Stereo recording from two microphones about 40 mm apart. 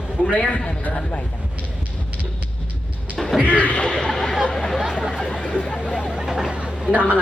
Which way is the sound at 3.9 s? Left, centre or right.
Centre.